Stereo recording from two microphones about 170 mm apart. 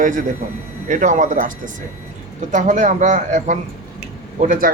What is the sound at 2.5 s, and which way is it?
A man's voice, 45° right (ahead or behind).